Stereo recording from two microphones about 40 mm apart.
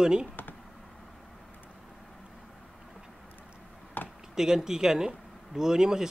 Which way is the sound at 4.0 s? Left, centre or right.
Left.